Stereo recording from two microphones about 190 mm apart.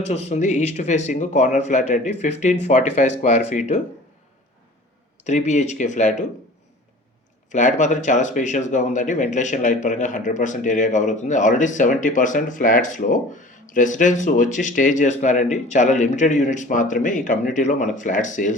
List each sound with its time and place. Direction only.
0.1 s speech: 35° left (ahead or behind)
5.2 s speech: 40° left (ahead or behind)
7.5 s speech: 40° left (ahead or behind)